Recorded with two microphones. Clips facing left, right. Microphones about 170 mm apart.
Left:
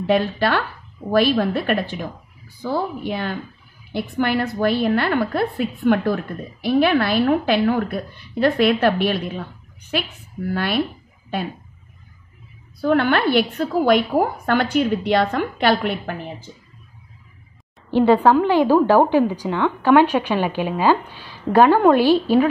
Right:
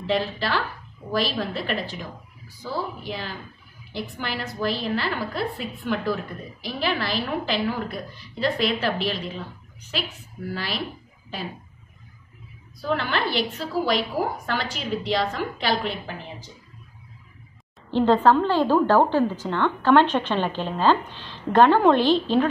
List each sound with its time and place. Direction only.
0.0 s a woman's voice: 60° left (ahead or behind)
10.5 s a woman's voice: 60° left (ahead or behind)
12.8 s a woman's voice: 60° left (ahead or behind)
17.9 s a woman's voice: 10° left (ahead or behind)